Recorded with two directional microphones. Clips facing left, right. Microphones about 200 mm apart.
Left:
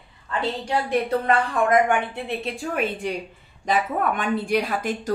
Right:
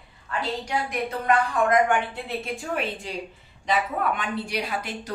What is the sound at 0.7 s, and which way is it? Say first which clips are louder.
Speech: left 6 dB; 30° left (ahead or behind).